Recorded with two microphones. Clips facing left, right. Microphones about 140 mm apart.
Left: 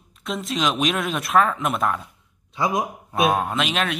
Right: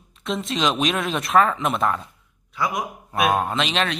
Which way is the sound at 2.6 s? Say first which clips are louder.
Left 3 dB; 25° left (ahead or behind).